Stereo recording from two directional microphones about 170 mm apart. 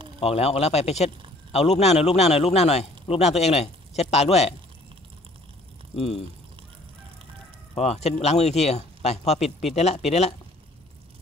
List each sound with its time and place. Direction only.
0.2 s a man's voice: 35° left (ahead or behind)
5.9 s a man's voice: 35° left (ahead or behind)
7.7 s a man's voice: 40° left (ahead or behind)